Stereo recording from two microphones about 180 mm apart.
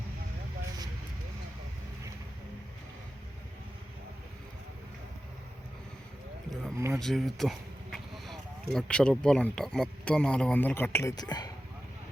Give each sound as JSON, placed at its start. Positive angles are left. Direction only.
{"t": 6.7, "sound": "speech", "side_deg": -15}
{"t": 7.0, "sound": "speech", "side_deg": 0}